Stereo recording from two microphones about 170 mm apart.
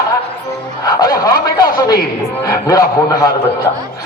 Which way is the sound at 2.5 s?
20° left (ahead or behind).